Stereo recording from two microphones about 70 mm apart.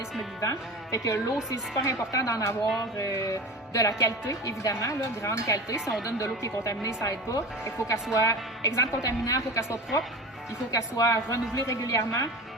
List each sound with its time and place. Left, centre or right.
0.4 s a woman's voice: left
4.7 s a woman's voice: left